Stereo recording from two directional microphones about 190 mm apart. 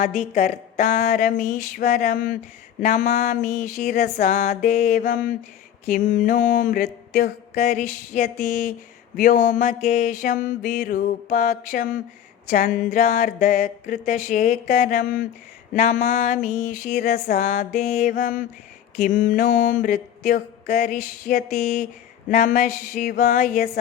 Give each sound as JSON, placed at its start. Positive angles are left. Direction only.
{"t": 0.0, "sound": "mantra", "side_deg": 45}
{"t": 4.7, "sound": "mantra", "side_deg": 50}